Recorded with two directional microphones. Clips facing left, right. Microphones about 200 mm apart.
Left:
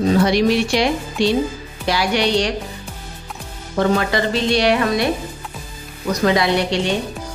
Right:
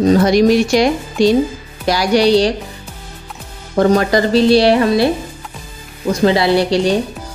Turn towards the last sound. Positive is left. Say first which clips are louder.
# right 6 dB
turn(degrees=-35)  # may be behind; listen again after turning